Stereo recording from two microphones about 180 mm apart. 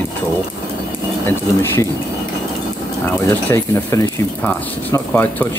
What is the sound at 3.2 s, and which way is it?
Speech, 15° left (ahead or behind).